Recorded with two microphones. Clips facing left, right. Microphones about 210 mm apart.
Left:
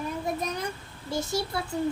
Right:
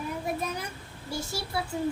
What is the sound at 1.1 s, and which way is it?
Speech, 5° right (ahead or behind).